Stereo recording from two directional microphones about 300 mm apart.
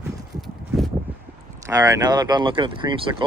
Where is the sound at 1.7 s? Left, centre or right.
Centre.